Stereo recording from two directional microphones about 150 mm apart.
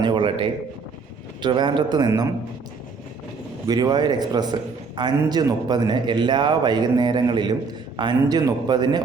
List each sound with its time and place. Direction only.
0.0 s a sound: 30° right (ahead or behind)
1.4 s a man's voice: 30° right (ahead or behind)
3.7 s a man's voice: 25° right (ahead or behind)